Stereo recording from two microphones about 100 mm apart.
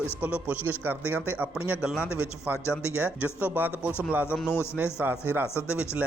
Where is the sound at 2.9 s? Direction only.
15° right (ahead or behind).